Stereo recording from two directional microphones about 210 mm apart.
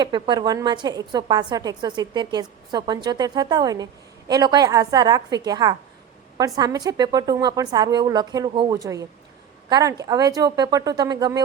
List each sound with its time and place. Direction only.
0.0 s a woman's voice: 20° right (ahead or behind)